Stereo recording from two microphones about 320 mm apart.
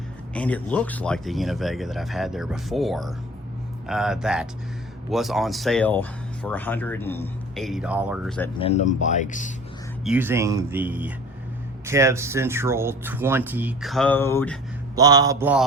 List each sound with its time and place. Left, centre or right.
0.3 s speech: centre
8.5 s speech: centre
10.0 s speech: centre
14.9 s speech: centre